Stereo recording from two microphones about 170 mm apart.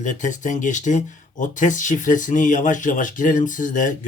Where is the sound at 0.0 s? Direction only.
45° left (ahead or behind).